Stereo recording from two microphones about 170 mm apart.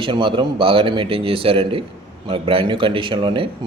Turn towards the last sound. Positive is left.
turn(degrees=-30)  # may be behind; listen again after turning